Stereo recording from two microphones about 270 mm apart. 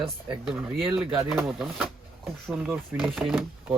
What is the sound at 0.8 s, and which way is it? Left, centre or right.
Speech, centre.